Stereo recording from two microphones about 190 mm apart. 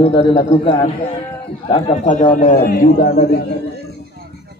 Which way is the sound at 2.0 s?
40° left (ahead or behind).